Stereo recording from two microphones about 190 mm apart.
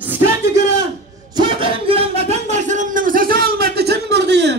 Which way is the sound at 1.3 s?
25° right (ahead or behind).